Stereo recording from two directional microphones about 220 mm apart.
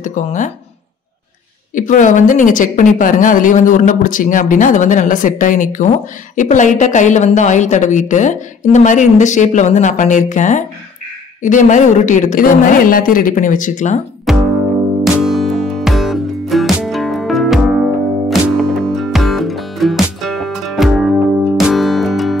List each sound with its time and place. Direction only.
0.0 s speech: 35° left (ahead or behind)
1.8 s speech: 35° left (ahead or behind)
14.3 s music: centre (ahead or behind)